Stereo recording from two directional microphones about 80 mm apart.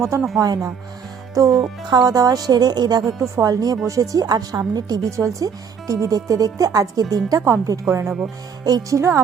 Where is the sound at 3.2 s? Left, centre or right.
Right.